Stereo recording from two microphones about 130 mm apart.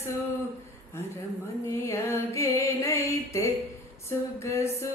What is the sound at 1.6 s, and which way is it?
Music, 20° left (ahead or behind).